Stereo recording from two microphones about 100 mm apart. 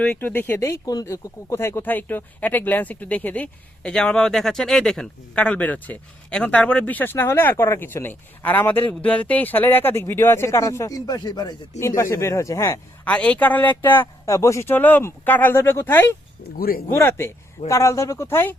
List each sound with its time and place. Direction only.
0.0 s speech: 15° left (ahead or behind)
0.7 s speech: 35° left (ahead or behind)
11.8 s speech: 30° left (ahead or behind)
13.1 s speech: 15° left (ahead or behind)
14.3 s speech: 30° left (ahead or behind)